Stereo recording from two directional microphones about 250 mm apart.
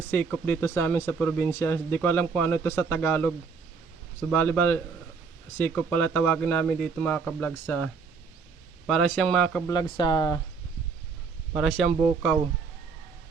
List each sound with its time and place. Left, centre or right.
0.1 s speech: centre
8.9 s speech: centre
11.5 s speech: centre